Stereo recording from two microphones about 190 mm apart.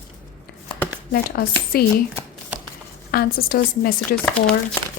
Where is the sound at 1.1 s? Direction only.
55° left (ahead or behind).